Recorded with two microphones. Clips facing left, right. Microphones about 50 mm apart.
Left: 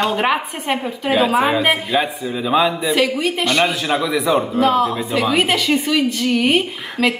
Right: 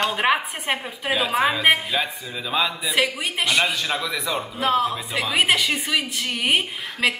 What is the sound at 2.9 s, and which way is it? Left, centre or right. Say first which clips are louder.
Speech: left 6 dB; centre.